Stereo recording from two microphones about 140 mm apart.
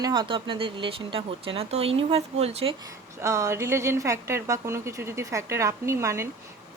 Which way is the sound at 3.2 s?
20° right (ahead or behind).